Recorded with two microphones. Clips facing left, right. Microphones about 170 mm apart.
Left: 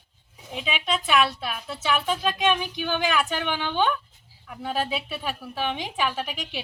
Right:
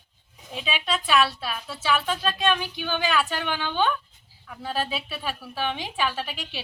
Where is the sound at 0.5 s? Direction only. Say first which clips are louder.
Left 1 dB; 10° left (ahead or behind).